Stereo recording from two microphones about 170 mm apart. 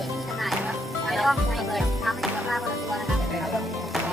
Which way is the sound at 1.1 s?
Centre (ahead or behind).